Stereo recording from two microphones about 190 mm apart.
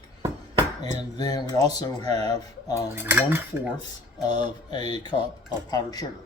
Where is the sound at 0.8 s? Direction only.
20° left (ahead or behind).